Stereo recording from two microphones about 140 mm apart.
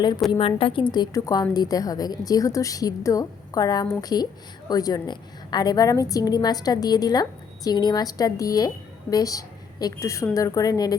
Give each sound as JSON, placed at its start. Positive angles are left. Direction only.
{"t": 0.3, "sound": "a woman's voice", "side_deg": 40}